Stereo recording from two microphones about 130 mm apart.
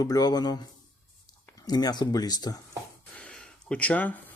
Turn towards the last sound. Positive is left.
turn(degrees=10)  # may be behind; listen again after turning